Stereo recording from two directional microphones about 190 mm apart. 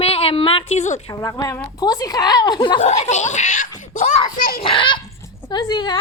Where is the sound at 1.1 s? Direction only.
20° left (ahead or behind).